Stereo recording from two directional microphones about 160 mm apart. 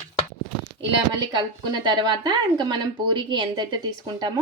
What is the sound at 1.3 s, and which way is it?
Speech, 25° right (ahead or behind).